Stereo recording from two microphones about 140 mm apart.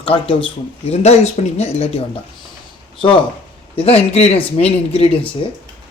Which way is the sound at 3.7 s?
45° left (ahead or behind).